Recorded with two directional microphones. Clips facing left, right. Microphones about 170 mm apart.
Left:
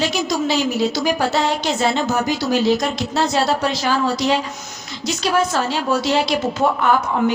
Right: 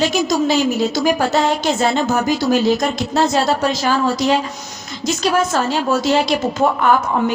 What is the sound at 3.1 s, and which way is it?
A woman's voice, 45° right (ahead or behind).